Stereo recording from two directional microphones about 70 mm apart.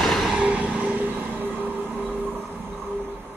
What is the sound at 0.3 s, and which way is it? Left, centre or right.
Vehicle, centre.